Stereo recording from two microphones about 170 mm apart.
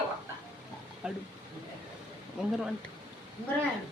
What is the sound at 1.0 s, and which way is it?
Speech, 5° right (ahead or behind).